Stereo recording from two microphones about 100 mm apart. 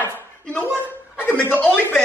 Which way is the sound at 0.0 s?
15° left (ahead or behind).